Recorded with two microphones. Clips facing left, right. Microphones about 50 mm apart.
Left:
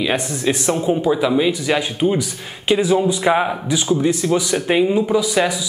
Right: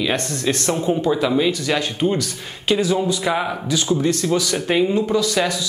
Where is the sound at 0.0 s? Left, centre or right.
Centre.